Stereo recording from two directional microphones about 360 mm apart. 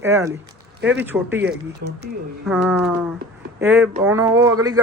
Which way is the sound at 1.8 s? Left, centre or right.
Right.